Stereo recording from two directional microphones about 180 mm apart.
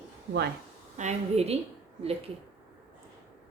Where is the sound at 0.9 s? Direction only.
40° right (ahead or behind).